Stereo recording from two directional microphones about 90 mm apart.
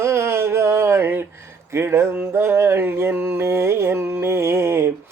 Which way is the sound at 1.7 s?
30° right (ahead or behind).